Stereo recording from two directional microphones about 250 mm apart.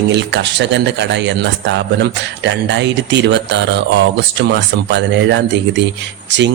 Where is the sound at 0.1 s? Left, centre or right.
Right.